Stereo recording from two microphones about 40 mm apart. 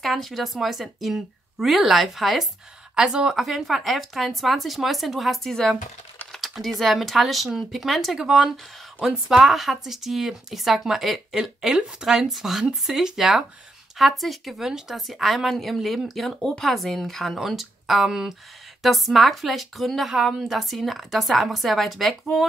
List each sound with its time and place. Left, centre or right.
0.0 s speech: centre
3.0 s speech: centre
3.4 s speech: centre
6.4 s speech: centre
18.8 s speech: centre